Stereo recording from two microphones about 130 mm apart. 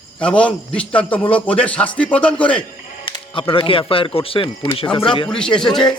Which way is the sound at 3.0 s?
40° left (ahead or behind).